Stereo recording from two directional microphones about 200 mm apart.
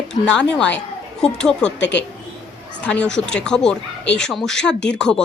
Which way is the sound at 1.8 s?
60° left (ahead or behind).